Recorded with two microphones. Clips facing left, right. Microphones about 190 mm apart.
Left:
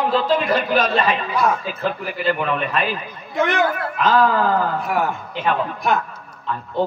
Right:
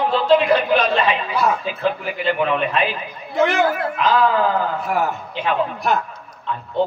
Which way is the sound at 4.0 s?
45° left (ahead or behind).